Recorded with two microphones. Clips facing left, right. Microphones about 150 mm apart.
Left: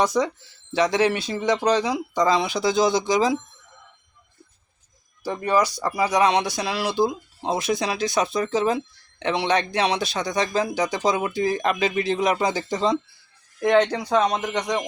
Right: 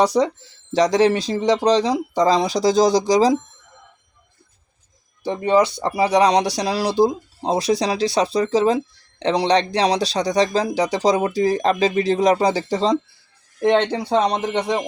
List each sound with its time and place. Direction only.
0.0 s speech: 35° right (ahead or behind)
5.2 s speech: 25° right (ahead or behind)